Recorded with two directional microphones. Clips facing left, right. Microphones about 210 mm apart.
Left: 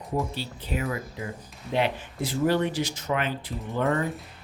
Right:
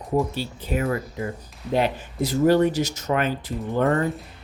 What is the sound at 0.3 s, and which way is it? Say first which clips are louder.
Speech: right 5 dB; 45° right (ahead or behind).